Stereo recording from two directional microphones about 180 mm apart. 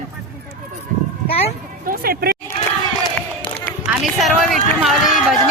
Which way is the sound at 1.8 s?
55° right (ahead or behind).